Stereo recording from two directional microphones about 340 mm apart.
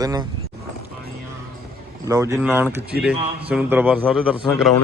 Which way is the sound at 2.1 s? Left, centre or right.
Centre.